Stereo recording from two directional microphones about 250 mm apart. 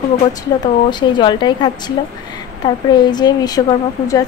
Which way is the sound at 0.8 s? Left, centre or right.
Centre.